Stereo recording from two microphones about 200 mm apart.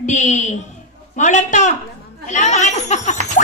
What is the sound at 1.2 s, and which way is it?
Speech, 35° left (ahead or behind).